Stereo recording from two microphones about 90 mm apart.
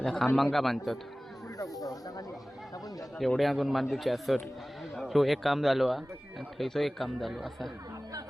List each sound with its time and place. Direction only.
0.0 s a man's voice: centre (ahead or behind)
1.8 s speech: 45° left (ahead or behind)
3.2 s a man's voice: centre (ahead or behind)